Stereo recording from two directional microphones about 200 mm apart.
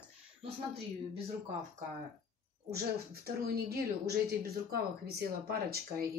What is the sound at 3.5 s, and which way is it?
Speech, 50° right (ahead or behind).